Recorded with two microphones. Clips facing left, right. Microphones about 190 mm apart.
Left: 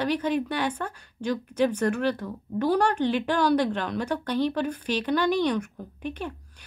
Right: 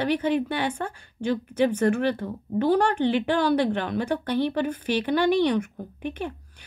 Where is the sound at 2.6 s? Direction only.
60° right (ahead or behind).